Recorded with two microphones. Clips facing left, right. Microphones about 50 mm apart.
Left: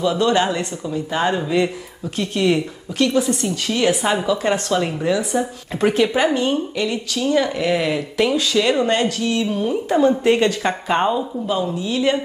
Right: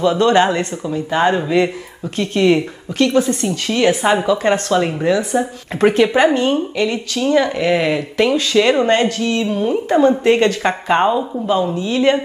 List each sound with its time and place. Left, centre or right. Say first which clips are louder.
0.2 s speech: right 5 dB; right
0.8 s a woman's voice: right 4 dB; right
6.1 s speech: right 4 dB; right
7.3 s a woman's voice: right 4 dB; right
8.4 s speech: right 4 dB; right
9.6 s a woman's voice: right 4 dB; right
11.5 s speech: right 5 dB; right